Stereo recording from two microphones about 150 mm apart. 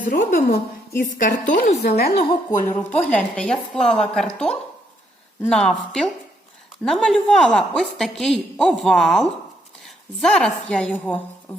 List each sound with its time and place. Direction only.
0.0 s a woman's voice: 60° left (ahead or behind); by 2.2 s 90° left
2.7 s a woman's voice: 10° left (ahead or behind)